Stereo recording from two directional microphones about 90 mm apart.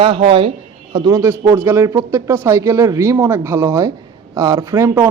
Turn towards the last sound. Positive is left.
turn(degrees=-35)  # may be behind; listen again after turning